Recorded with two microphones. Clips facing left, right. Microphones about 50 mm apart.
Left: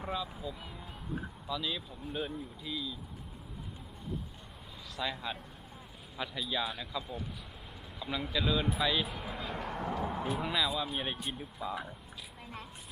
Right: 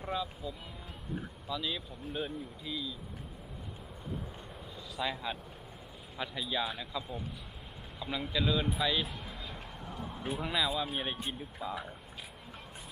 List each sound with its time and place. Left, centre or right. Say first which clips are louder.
0.1 s speech: right 2 dB; centre
4.9 s speech: right 1 dB; centre
9.1 s speech: left 4 dB; centre
9.6 s speech: left 8 dB; left
10.3 s speech: right 3 dB; centre